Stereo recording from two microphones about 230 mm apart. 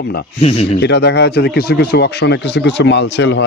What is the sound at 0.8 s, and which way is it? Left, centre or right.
A man's voice, left.